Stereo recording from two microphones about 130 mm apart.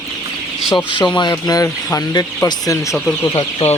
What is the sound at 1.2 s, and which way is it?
Speech, 30° left (ahead or behind).